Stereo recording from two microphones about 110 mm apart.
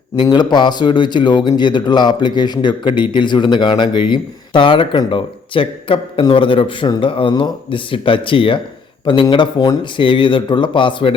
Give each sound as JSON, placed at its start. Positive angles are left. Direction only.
{"t": 0.2, "sound": "a man's voice", "side_deg": 40}